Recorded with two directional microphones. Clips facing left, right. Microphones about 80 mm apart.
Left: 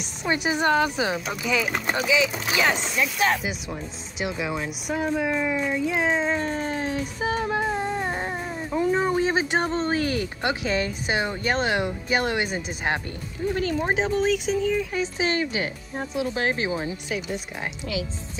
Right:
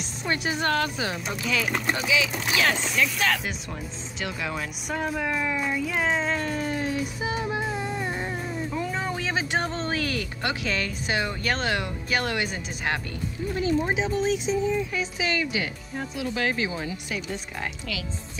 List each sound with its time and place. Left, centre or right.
0.0 s speech: centre
1.1 s speech: centre; by 3.3 s left
3.4 s speech: centre
4.8 s speech: centre
6.3 s music: left
13.6 s speech: left
15.0 s speech: left